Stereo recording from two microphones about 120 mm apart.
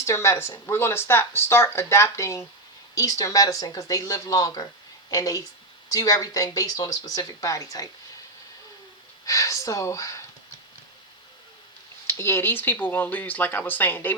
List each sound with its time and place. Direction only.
0.0 s speech: 25° left (ahead or behind)
9.2 s speech: 30° left (ahead or behind)
12.0 s speech: 20° left (ahead or behind)